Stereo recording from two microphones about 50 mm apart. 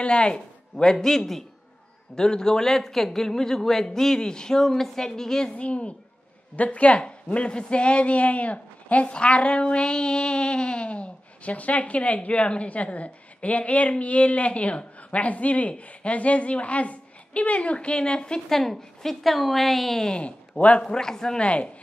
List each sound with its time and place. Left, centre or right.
0.0 s a man's voice: centre
5.5 s a woman's voice: left
18.5 s a woman's voice: centre
20.1 s a woman's voice: left
20.9 s a man's voice: centre